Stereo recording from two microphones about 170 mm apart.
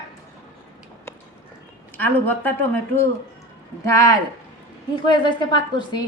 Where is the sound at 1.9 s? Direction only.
10° left (ahead or behind).